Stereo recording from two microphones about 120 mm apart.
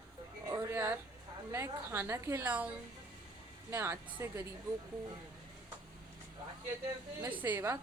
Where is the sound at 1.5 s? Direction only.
20° right (ahead or behind).